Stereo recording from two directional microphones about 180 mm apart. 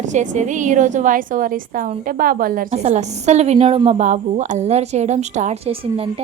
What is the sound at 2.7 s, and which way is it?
A woman's voice, 40° right (ahead or behind).